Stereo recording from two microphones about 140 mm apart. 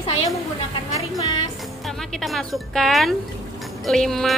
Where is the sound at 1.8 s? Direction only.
Centre (ahead or behind).